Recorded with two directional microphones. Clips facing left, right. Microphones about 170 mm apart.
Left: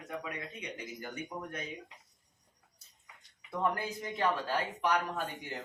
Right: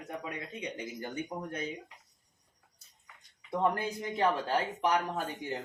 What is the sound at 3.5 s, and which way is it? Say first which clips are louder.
Speech: right 3 dB; 25° right (ahead or behind).